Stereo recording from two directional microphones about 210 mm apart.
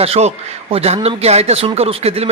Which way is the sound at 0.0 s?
30° right (ahead or behind).